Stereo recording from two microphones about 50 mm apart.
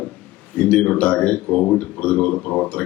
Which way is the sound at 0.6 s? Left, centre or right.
Left.